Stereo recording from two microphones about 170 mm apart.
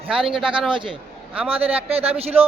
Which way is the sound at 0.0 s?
30° right (ahead or behind).